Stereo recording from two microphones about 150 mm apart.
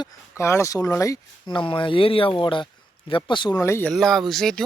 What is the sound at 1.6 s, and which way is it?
Speech, 35° left (ahead or behind).